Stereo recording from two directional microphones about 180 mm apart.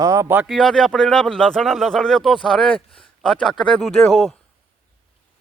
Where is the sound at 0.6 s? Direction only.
Centre (ahead or behind).